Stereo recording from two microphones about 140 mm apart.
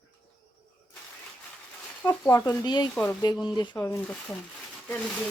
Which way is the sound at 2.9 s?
10° left (ahead or behind).